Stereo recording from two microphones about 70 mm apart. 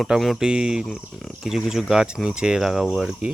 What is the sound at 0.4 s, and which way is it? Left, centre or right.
Speech, centre.